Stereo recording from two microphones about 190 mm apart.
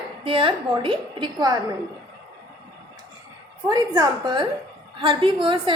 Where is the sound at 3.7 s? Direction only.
20° right (ahead or behind).